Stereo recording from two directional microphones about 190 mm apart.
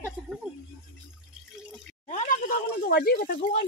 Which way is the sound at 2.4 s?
55° left (ahead or behind).